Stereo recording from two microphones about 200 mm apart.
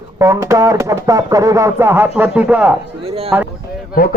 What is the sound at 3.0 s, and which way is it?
Speech, 30° right (ahead or behind).